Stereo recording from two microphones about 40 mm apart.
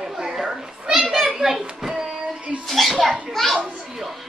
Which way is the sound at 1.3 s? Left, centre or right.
Centre.